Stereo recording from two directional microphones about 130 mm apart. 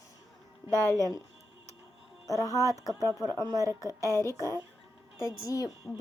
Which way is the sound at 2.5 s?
25° right (ahead or behind).